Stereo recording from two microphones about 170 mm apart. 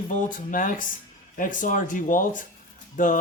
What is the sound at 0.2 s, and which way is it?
Speech, 50° left (ahead or behind).